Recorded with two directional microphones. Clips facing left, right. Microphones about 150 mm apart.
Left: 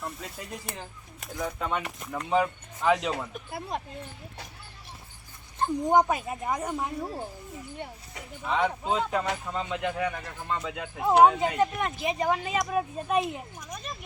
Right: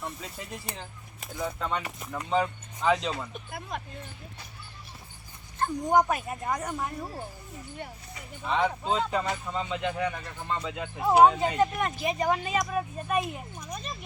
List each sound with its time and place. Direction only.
0.0 s speech: centre (ahead or behind)
3.5 s speech: 35° left (ahead or behind)
5.5 s speech: 20° left (ahead or behind)
6.4 s speech: 10° left (ahead or behind)
6.7 s speech: 20° left (ahead or behind)
8.4 s speech: 5° left (ahead or behind)
11.9 s speech: 15° left (ahead or behind)